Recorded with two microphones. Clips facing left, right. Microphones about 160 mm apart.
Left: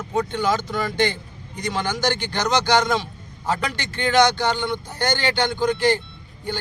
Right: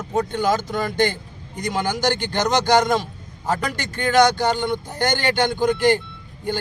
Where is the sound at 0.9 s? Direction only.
45° right (ahead or behind).